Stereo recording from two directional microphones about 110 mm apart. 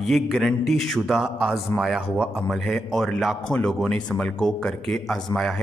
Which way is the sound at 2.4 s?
5° left (ahead or behind).